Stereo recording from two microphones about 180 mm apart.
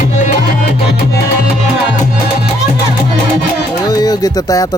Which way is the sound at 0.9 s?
65° left (ahead or behind).